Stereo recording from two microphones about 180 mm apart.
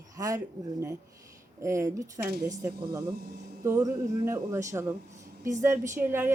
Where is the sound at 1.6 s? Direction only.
15° right (ahead or behind).